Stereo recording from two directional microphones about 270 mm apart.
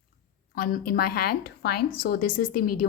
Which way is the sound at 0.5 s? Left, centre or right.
Left.